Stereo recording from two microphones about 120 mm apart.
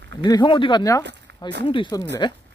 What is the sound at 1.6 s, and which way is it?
Speech, 45° left (ahead or behind).